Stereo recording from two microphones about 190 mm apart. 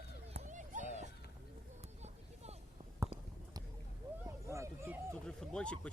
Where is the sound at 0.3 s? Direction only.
40° right (ahead or behind).